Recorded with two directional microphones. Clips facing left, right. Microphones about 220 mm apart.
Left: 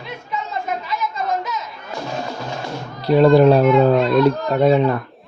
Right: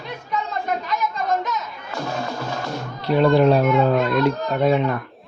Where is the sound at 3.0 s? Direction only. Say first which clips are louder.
Left 4 dB; 40° left (ahead or behind).